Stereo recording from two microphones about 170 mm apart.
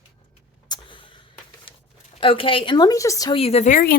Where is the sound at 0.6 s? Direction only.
25° left (ahead or behind).